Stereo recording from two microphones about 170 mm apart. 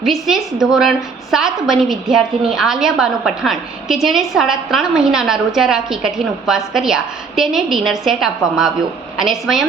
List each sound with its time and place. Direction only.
0.0 s a woman's voice: centre (ahead or behind)